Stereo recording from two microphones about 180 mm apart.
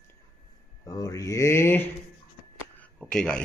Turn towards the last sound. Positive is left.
turn(degrees=5)  # may be behind; listen again after turning